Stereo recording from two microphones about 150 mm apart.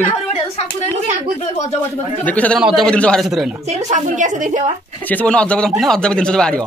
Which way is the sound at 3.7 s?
50° right (ahead or behind).